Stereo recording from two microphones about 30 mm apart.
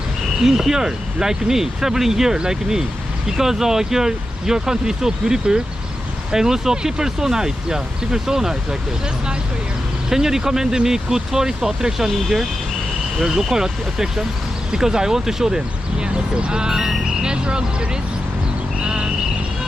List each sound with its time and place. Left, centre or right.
0.4 s speech: centre
10.1 s speech: centre; by 17.8 s right